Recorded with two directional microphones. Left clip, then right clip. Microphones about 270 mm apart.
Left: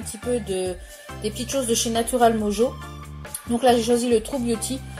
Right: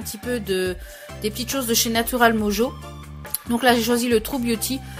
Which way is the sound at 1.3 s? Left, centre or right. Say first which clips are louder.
Even; right.